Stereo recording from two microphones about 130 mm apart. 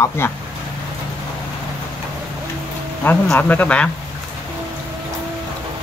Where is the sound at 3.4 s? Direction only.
10° left (ahead or behind).